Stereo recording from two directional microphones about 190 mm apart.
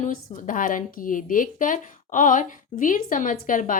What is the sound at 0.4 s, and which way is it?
A woman's voice, 45° left (ahead or behind).